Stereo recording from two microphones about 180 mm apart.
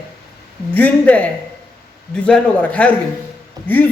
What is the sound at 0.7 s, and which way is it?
Speech, 10° left (ahead or behind).